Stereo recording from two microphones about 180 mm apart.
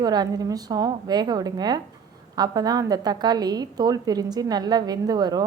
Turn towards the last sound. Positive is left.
turn(degrees=-20)  # may be behind; listen again after turning